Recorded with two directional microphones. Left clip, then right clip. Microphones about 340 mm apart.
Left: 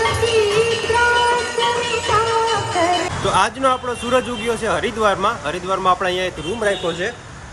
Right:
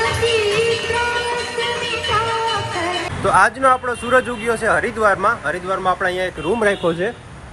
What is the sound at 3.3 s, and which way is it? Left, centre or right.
Speech, centre.